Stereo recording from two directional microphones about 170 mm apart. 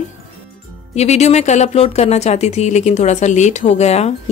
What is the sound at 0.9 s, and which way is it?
Speech, 40° left (ahead or behind).